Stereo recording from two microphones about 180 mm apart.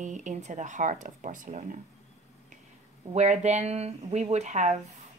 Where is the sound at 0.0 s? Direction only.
45° right (ahead or behind).